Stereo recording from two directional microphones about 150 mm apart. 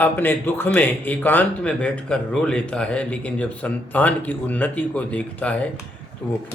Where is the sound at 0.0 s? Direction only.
15° left (ahead or behind).